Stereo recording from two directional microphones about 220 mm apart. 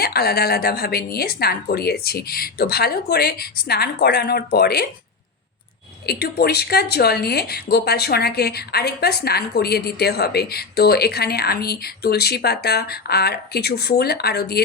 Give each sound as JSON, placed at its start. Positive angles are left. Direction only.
{"t": 0.0, "sound": "a woman's voice", "side_deg": 45}
{"t": 6.1, "sound": "a woman's voice", "side_deg": 45}